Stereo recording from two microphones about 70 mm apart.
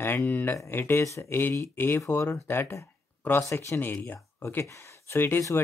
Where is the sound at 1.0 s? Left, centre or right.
Left.